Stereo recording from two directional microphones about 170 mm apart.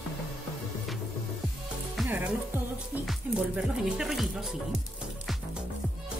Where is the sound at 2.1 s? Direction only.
10° right (ahead or behind).